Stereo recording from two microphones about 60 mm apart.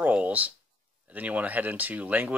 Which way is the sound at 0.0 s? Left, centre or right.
Right.